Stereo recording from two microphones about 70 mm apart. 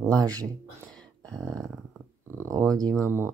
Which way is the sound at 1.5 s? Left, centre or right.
Centre.